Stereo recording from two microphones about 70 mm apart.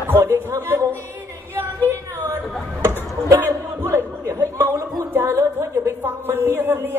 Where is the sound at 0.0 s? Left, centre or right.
Right.